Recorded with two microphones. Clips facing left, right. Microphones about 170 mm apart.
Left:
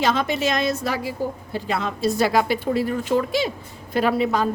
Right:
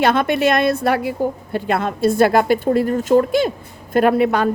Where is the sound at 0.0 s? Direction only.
60° right (ahead or behind).